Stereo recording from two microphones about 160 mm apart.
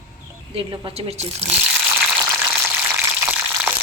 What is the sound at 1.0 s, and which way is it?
Speech, 40° right (ahead or behind).